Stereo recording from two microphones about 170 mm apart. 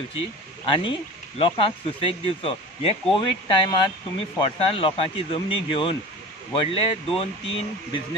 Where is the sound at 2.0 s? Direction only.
35° left (ahead or behind).